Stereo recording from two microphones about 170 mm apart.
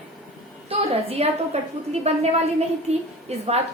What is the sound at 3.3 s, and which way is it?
Speech, 40° right (ahead or behind).